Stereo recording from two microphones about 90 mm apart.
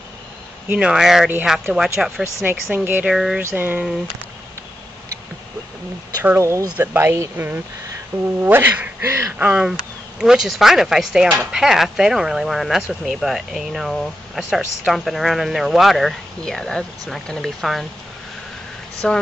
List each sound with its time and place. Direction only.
0.7 s speech: 10° right (ahead or behind)
2.4 s speech: 20° right (ahead or behind)
3.1 s speech: 5° right (ahead or behind)
3.4 s speech: 20° right (ahead or behind)
6.2 s speech: 30° right (ahead or behind)
9.4 s speech: 10° right (ahead or behind)
19.0 s speech: 10° left (ahead or behind)